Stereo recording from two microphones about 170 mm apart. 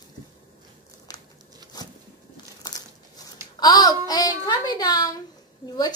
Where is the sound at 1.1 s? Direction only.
20° left (ahead or behind).